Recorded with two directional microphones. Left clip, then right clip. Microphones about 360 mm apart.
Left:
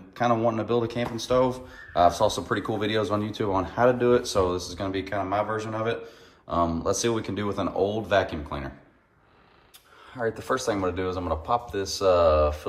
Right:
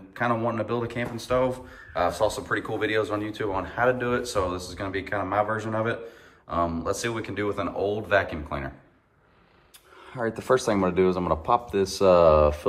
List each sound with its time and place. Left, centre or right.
0.1 s speech: centre
10.2 s a man's voice: right